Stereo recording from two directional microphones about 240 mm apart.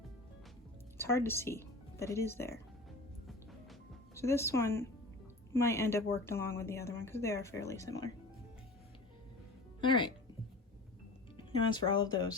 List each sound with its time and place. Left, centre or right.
0.9 s speech: centre
4.1 s speech: centre
11.6 s speech: centre